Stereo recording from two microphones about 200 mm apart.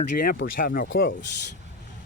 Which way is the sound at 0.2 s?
45° left (ahead or behind).